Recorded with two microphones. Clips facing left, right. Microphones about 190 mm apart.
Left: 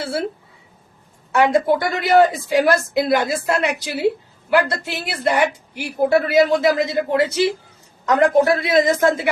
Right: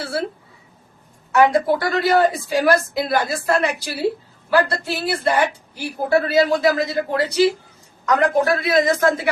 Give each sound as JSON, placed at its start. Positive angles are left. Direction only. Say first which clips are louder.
{"t": 0.0, "sound": "speech", "louder": "left 1 dB", "side_deg": 25}
{"t": 1.3, "sound": "a woman's voice", "louder": "even", "side_deg": 25}